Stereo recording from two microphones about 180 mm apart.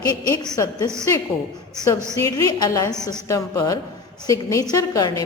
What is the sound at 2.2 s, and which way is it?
A woman's voice, 20° left (ahead or behind).